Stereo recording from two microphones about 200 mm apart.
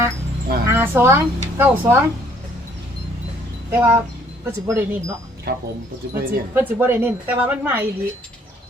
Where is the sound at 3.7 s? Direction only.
15° right (ahead or behind).